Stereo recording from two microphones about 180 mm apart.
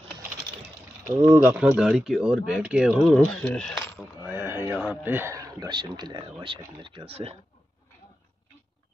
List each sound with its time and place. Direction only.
1.0 s speech: 10° right (ahead or behind); by 4.1 s 5° left (ahead or behind)
4.3 s speech: 10° right (ahead or behind); by 7.3 s 35° right (ahead or behind)